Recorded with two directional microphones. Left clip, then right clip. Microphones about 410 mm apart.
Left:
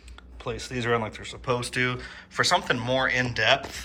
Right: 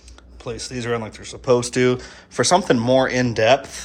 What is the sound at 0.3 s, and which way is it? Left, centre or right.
Speech, centre.